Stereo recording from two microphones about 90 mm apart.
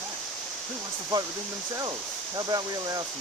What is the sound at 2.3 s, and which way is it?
Speech, 40° right (ahead or behind).